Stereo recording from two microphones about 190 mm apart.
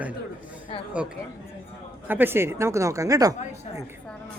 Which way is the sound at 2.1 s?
10° right (ahead or behind).